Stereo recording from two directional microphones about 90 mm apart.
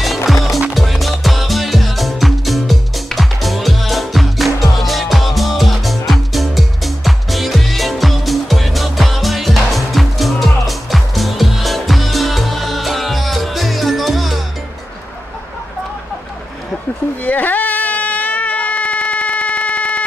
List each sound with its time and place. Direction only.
0.0 s music: centre (ahead or behind)
17.2 s baby cry: 20° left (ahead or behind)